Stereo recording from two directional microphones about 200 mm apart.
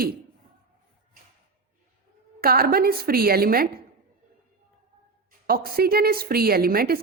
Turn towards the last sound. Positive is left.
turn(degrees=-50)  # may be behind; listen again after turning